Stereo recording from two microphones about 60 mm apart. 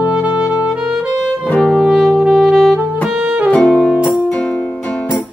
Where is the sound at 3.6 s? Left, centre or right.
Centre.